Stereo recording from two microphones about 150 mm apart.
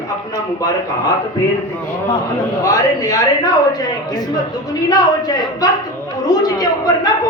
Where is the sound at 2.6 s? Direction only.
25° left (ahead or behind).